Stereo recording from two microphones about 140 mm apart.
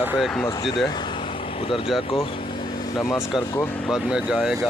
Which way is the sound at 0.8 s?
35° left (ahead or behind).